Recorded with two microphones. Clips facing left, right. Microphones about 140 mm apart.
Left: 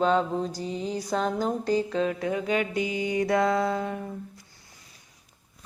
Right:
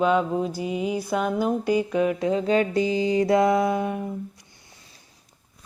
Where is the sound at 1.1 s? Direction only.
10° right (ahead or behind).